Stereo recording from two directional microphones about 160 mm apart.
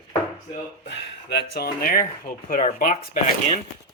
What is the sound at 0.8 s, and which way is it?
Speech, 90° left.